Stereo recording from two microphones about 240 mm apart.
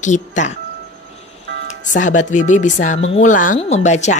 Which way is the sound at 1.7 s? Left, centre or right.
Left.